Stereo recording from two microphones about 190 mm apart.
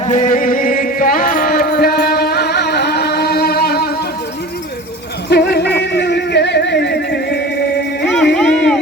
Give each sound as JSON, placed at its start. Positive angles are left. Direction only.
{"t": 0.0, "sound": "chant", "side_deg": 40}
{"t": 5.3, "sound": "music", "side_deg": 60}
{"t": 8.0, "sound": "a sound", "side_deg": 0}